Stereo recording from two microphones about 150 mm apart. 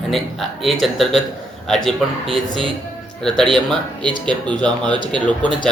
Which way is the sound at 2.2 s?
35° right (ahead or behind).